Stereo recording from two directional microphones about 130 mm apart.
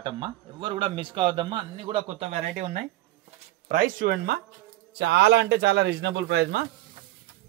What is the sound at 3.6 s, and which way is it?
Speech, 90° right.